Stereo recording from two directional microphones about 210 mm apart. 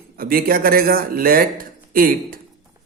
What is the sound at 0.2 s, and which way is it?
Speech, 45° right (ahead or behind).